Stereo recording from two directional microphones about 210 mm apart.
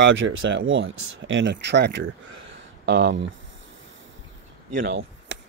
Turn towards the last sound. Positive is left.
turn(degrees=-55)  # may be behind; listen again after turning